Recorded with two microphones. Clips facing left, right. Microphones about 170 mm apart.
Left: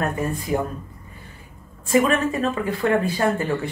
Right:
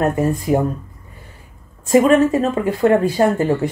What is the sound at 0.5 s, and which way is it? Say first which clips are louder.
Speech: right 6 dB; 55° right (ahead or behind).